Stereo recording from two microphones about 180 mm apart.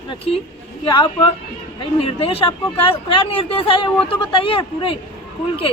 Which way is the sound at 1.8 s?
30° left (ahead or behind).